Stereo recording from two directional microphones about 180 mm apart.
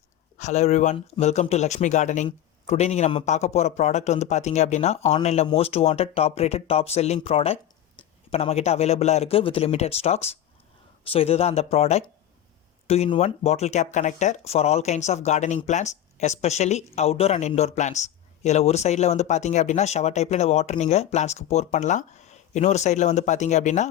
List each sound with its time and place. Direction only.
0.3 s speech: 40° left (ahead or behind)